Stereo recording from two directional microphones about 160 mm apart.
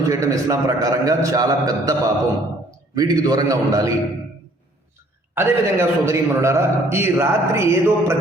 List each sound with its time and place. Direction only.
0.1 s a man's voice: 20° right (ahead or behind)
5.3 s a man's voice: 15° right (ahead or behind)